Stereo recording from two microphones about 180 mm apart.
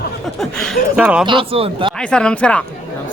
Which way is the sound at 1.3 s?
30° right (ahead or behind).